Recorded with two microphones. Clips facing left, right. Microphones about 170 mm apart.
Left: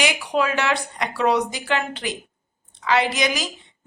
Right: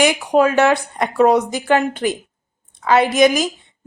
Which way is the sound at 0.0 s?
50° right (ahead or behind).